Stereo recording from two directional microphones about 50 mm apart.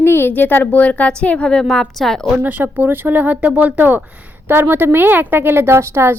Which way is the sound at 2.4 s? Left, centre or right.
Right.